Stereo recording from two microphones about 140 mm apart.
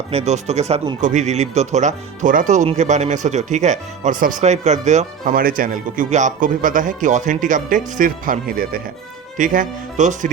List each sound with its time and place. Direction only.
0.1 s speech: 50° right (ahead or behind); by 8.8 s 90° right
9.4 s speech: 70° right (ahead or behind)